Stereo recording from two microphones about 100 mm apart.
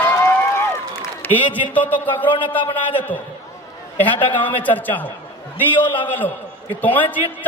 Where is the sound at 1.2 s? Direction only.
15° left (ahead or behind).